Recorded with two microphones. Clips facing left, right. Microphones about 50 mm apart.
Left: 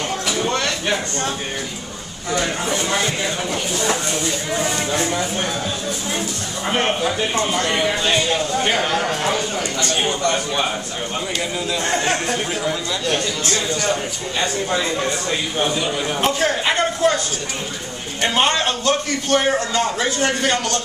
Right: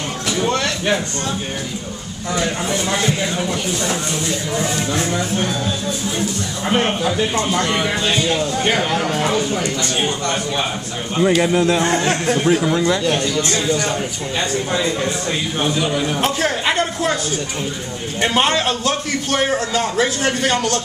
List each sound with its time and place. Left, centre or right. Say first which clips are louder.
0.4 s a sound: right 4 dB; centre
2.3 s a man's voice: right 1 dB; centre
4.6 s speech: even; centre
6.7 s a man's voice: right 1 dB; centre
11.4 s speech: right 8 dB; right
11.9 s a man's voice: right 3 dB; centre
12.7 s speech: right 8 dB; right
13.0 s a man's voice: right 3 dB; centre
15.6 s a man's voice: right 3 dB; centre
18.2 s a man's voice: right 1 dB; centre